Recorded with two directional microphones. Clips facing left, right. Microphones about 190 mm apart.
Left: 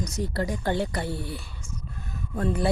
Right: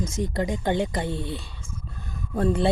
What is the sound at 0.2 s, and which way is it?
Speech, 20° right (ahead or behind).